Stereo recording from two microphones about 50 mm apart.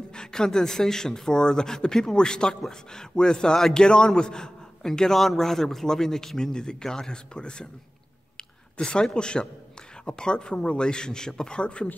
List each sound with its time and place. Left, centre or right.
0.1 s a man's voice: centre